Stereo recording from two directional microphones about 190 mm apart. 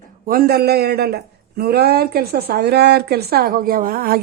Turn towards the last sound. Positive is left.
turn(degrees=-50)  # may be behind; listen again after turning